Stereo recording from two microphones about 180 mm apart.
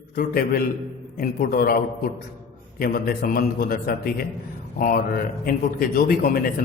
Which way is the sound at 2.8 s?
50° left (ahead or behind).